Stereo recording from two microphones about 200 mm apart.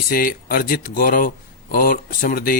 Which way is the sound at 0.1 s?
50° left (ahead or behind).